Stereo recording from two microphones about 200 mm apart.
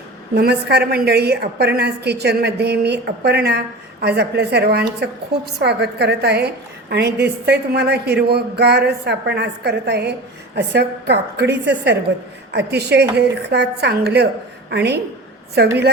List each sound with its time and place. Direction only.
0.3 s a woman's voice: 55° right (ahead or behind)